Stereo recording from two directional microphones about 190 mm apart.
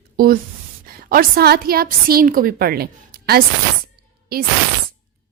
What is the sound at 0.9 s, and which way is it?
A woman's voice, 50° right (ahead or behind).